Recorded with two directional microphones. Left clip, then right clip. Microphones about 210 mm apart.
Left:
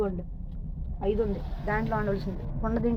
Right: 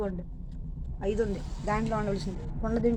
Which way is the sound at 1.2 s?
25° right (ahead or behind).